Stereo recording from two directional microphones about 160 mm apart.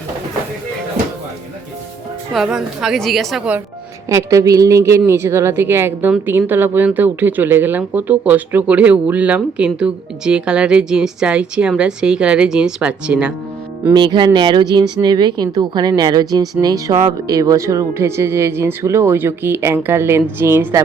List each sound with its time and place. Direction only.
2.3 s a woman's voice: 5° right (ahead or behind)
4.1 s a woman's voice: 20° right (ahead or behind)
13.9 s a woman's voice: 30° right (ahead or behind)